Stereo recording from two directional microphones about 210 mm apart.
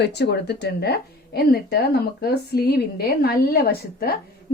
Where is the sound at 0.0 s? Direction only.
55° left (ahead or behind).